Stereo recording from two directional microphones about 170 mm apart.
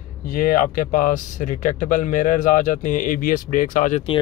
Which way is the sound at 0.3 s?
55° left (ahead or behind).